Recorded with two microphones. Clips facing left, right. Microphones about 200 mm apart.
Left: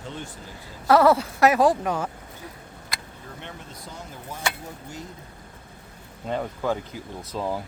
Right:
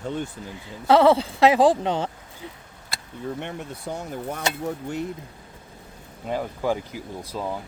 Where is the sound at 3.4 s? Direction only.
70° right (ahead or behind).